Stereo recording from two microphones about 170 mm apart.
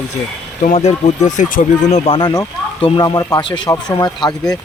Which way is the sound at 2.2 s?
20° left (ahead or behind).